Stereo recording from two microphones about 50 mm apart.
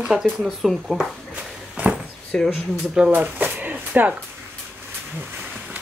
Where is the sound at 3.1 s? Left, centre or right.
Right.